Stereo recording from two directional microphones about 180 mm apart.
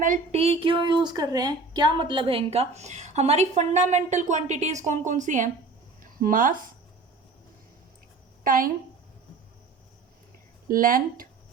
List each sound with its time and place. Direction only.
0.0 s a woman's voice: 40° right (ahead or behind)
6.0 s a sound: 50° right (ahead or behind)
8.4 s speech: 50° right (ahead or behind)
10.7 s speech: 50° right (ahead or behind)